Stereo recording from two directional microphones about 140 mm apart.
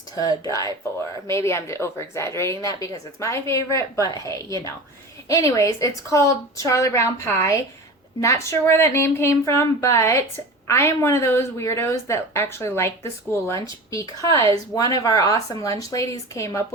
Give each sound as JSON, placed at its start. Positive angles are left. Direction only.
{"t": 0.2, "sound": "speech", "side_deg": 25}